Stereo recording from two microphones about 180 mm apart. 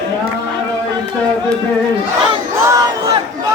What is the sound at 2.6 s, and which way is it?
Crowd, 15° right (ahead or behind).